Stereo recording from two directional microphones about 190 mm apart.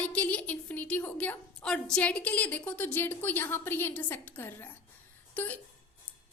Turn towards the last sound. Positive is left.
turn(degrees=10)  # may be behind; listen again after turning